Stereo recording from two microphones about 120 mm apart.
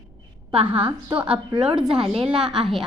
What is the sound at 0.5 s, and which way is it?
Speech, 45° right (ahead or behind).